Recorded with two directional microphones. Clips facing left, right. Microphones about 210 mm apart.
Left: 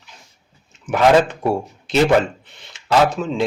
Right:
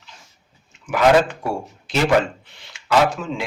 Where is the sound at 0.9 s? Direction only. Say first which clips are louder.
Left 1 dB; 20° left (ahead or behind).